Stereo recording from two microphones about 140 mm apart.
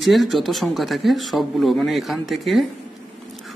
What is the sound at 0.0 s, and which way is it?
A man's voice, centre (ahead or behind).